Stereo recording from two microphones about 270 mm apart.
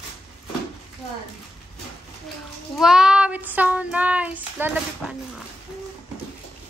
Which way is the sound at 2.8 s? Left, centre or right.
Centre.